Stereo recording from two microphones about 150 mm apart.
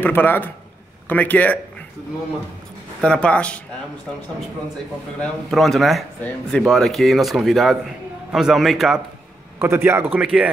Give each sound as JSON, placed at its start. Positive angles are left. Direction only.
{"t": 0.0, "sound": "speech", "side_deg": 15}
{"t": 3.0, "sound": "speech", "side_deg": 5}
{"t": 5.2, "sound": "speech", "side_deg": 0}
{"t": 9.6, "sound": "a man's voice", "side_deg": -15}